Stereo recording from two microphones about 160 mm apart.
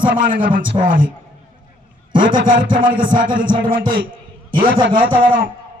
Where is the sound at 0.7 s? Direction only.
60° right (ahead or behind).